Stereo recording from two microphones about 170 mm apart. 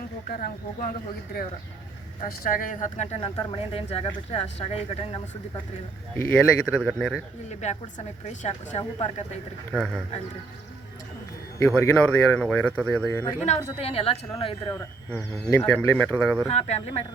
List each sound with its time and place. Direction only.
0.3 s speech: 55° left (ahead or behind)
2.2 s speech: 55° left (ahead or behind)
3.2 s a woman's voice: 30° left (ahead or behind)
6.3 s a man's voice: centre (ahead or behind)
7.6 s a woman's voice: 45° left (ahead or behind)
9.7 s a man's voice: centre (ahead or behind)
11.7 s speech: 10° left (ahead or behind)
13.1 s speech: 15° left (ahead or behind)
13.7 s a woman's voice: 35° left (ahead or behind)
14.7 s speech: 15° left (ahead or behind)
16.5 s a woman's voice: 40° left (ahead or behind)